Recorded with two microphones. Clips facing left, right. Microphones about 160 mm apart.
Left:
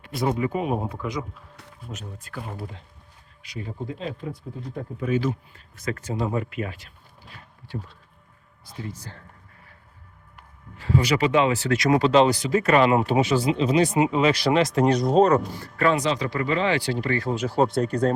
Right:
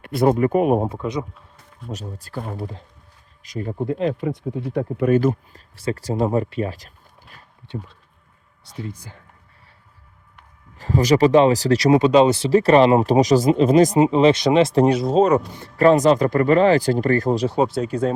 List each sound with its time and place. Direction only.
0.0 s speech: 60° right (ahead or behind)
0.9 s speech: 25° right (ahead or behind)
1.9 s speech: 35° right (ahead or behind)
3.7 s speech: 60° right (ahead or behind)
5.7 s speech: 30° right (ahead or behind)
10.8 s speech: 40° right (ahead or behind)
11.9 s speech: 20° right (ahead or behind)
14.8 s speech: 5° right (ahead or behind)
15.3 s speech: 20° right (ahead or behind)
15.8 s speech: 40° right (ahead or behind)
17.6 s speech: 5° right (ahead or behind)